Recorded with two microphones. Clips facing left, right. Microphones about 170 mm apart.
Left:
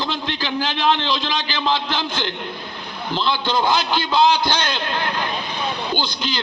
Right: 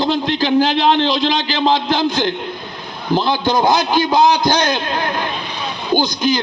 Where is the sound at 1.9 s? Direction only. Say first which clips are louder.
Right 8 dB; 45° right (ahead or behind).